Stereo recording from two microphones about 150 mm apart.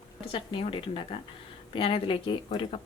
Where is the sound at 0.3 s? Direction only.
35° left (ahead or behind).